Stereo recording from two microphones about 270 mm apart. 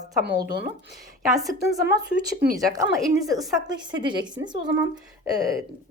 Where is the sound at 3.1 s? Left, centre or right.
Centre.